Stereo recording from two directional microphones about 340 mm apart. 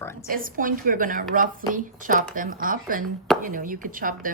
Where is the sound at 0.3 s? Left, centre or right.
Right.